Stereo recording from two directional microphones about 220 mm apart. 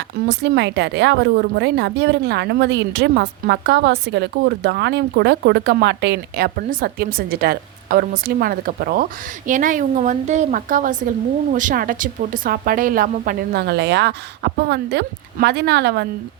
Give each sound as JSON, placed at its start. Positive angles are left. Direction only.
{"t": 0.3, "sound": "a woman's voice", "side_deg": -50}